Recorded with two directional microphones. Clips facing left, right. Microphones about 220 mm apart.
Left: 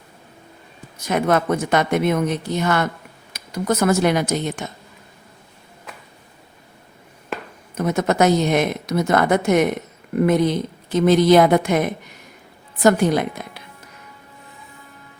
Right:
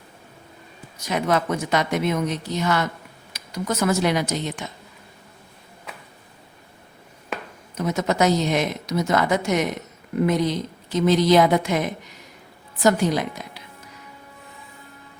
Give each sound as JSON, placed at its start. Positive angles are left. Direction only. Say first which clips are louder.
{"t": 1.0, "sound": "a woman's voice", "louder": "left 4 dB", "side_deg": 50}
{"t": 7.8, "sound": "a woman's voice", "louder": "left 3 dB", "side_deg": 55}